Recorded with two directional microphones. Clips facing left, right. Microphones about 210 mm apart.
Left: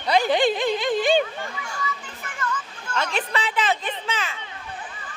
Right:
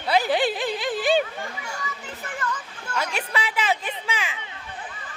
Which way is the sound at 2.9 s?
10° right (ahead or behind).